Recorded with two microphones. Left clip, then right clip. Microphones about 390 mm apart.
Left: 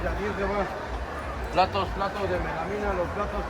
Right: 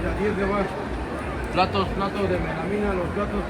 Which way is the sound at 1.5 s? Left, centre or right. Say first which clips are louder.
Right 1 dB; left.